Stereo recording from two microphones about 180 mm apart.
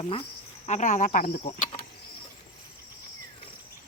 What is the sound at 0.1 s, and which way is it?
Cricket, 30° left (ahead or behind).